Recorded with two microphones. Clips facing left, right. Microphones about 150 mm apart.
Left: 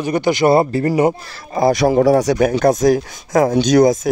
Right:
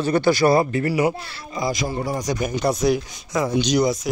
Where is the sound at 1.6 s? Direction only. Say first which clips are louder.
Left 11 dB; 65° left (ahead or behind).